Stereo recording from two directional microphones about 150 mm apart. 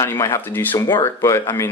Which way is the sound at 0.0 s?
15° left (ahead or behind).